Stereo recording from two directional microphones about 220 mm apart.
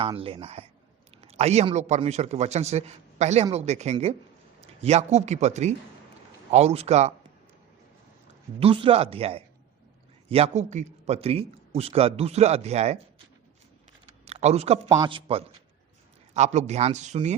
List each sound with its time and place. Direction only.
0.0 s a man's voice: 25° right (ahead or behind)
8.5 s a man's voice: 25° right (ahead or behind)
14.3 s a man's voice: 30° right (ahead or behind)